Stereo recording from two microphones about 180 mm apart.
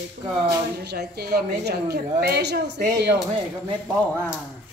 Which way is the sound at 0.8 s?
65° right (ahead or behind).